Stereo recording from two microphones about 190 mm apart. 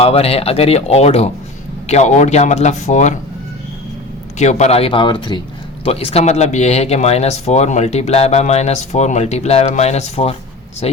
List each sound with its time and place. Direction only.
0.0 s speech: 30° left (ahead or behind)
4.4 s speech: 35° left (ahead or behind)